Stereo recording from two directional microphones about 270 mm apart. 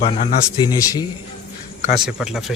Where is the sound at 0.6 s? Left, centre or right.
Centre.